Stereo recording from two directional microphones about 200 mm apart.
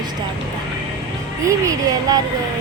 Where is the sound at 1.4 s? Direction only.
15° right (ahead or behind).